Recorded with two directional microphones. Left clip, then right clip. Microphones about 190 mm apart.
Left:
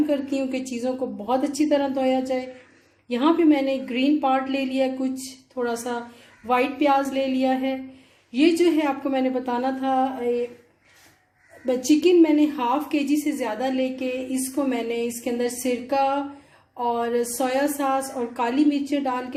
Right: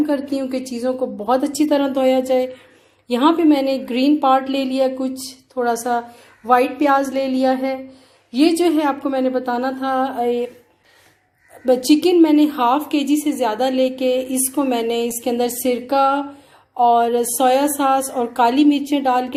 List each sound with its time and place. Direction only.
0.1 s a woman's voice: 30° right (ahead or behind); by 10.4 s 45° right (ahead or behind)
11.6 s a woman's voice: 45° right (ahead or behind)